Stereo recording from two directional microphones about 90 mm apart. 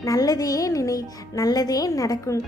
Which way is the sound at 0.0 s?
40° left (ahead or behind).